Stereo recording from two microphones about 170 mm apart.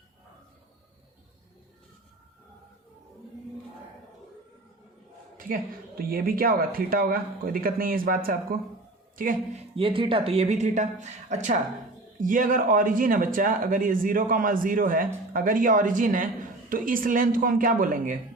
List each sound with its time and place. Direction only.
6.0 s speech: 60° right (ahead or behind)
9.7 s speech: 30° right (ahead or behind); by 18.2 s 50° right (ahead or behind)